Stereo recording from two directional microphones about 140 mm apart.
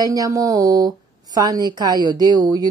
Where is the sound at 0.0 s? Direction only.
25° right (ahead or behind).